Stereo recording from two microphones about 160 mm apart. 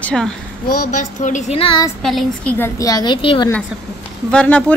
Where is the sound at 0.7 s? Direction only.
50° left (ahead or behind).